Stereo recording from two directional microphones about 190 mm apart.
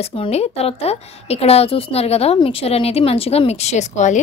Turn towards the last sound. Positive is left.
turn(degrees=40)  # may be behind; listen again after turning